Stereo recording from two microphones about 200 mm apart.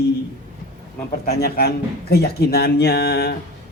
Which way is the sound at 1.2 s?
50° left (ahead or behind).